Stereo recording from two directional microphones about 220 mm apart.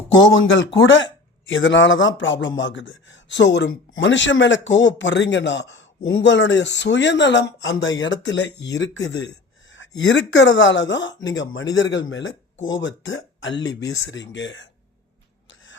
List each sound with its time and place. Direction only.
0.1 s speech: 60° left (ahead or behind)